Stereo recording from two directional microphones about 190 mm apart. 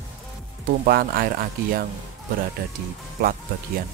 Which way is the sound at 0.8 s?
50° right (ahead or behind).